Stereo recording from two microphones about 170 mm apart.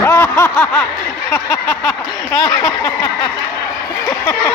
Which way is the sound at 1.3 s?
5° left (ahead or behind).